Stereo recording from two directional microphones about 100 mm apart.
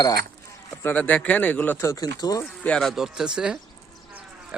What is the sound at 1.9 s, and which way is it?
Speech, 40° left (ahead or behind).